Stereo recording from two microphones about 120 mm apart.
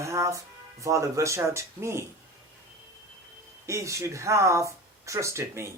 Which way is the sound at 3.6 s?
25° right (ahead or behind).